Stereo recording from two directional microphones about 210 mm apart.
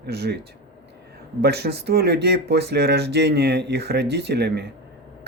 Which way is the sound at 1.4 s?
50° right (ahead or behind).